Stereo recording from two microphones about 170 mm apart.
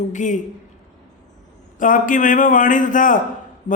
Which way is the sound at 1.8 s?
50° left (ahead or behind).